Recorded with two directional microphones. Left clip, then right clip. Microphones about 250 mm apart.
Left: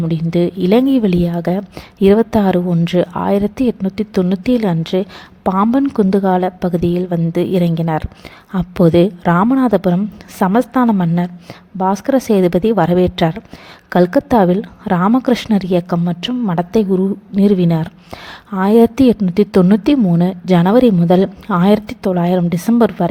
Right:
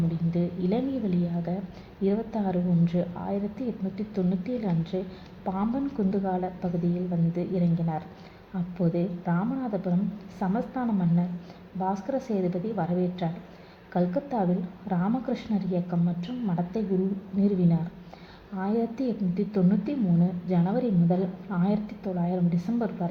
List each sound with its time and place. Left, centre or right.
0.3 s a woman's voice: left